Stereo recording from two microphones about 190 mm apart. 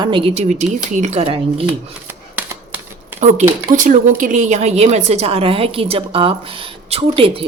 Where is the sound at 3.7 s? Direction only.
40° right (ahead or behind).